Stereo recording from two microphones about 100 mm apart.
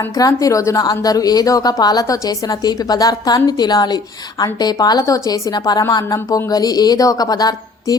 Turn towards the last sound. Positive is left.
turn(degrees=40)  # may be behind; listen again after turning